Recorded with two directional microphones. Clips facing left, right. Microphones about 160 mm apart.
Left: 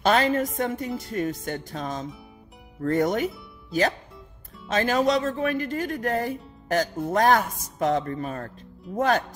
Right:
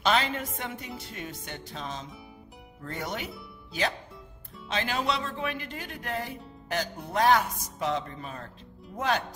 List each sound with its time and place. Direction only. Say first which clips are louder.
0.0 s speech: left 6 dB; 45° left (ahead or behind)
4.6 s speech: left 8 dB; 45° left (ahead or behind)